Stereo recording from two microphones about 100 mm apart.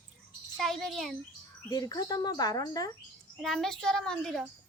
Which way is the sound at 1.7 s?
40° left (ahead or behind).